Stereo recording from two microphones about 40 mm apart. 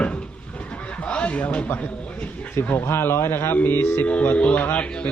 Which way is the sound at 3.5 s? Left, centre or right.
Left.